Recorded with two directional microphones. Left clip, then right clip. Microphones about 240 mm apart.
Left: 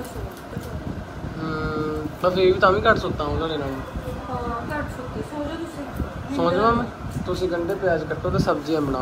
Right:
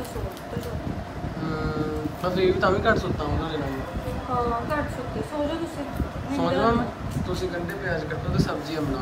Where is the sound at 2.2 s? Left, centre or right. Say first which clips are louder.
Left 5 dB; centre.